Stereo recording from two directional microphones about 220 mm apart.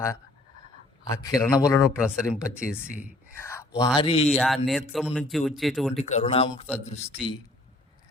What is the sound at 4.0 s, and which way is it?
Speech, 25° left (ahead or behind).